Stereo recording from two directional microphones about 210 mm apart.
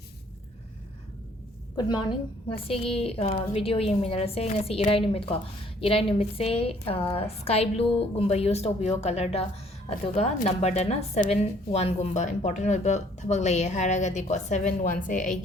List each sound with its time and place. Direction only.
1.7 s a woman's voice: 20° left (ahead or behind); by 15.4 s 35° left (ahead or behind)